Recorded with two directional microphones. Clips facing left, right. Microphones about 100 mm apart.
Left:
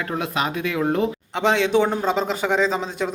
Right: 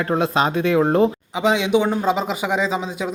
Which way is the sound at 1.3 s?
5° right (ahead or behind).